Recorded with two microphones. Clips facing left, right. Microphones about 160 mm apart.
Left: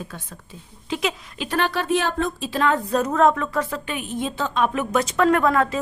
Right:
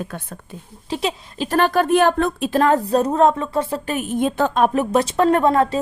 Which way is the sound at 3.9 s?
45° right (ahead or behind).